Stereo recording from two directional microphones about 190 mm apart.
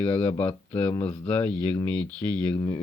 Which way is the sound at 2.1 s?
20° right (ahead or behind).